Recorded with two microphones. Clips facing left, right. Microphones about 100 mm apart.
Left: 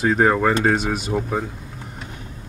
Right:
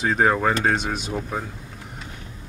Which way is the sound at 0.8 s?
45° left (ahead or behind).